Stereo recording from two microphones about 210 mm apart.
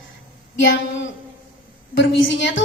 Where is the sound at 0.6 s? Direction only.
60° left (ahead or behind).